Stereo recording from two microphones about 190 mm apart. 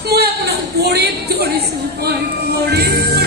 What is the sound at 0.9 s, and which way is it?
Speech, 55° right (ahead or behind).